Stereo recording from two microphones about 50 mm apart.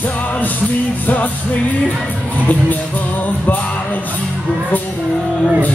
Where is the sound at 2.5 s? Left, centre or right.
Left.